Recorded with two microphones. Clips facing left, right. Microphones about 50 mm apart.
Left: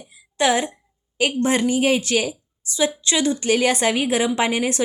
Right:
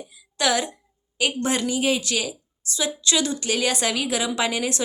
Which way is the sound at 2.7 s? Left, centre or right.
Left.